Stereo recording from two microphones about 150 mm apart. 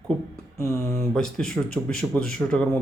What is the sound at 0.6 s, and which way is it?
Speech, 20° right (ahead or behind).